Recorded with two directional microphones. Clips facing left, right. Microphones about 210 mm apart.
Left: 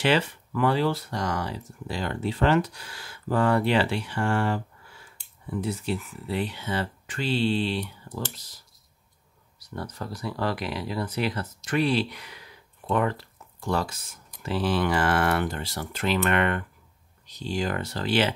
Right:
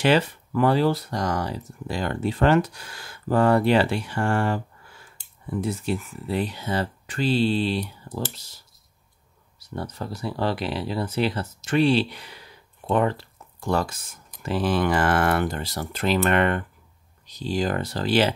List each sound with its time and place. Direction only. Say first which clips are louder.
0.0 s speech: right 3 dB; 40° right (ahead or behind)
5.6 s speech: right 2 dB; 45° right (ahead or behind)
9.8 s speech: right 3 dB; 25° right (ahead or behind)
13.7 s speech: right 3 dB; 50° right (ahead or behind)